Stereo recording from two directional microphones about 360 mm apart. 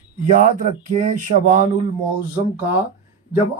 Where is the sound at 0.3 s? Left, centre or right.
Right.